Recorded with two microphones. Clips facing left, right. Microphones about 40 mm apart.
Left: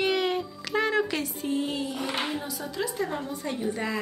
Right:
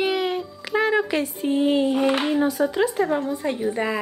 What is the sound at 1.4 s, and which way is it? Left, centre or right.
A woman's voice, right.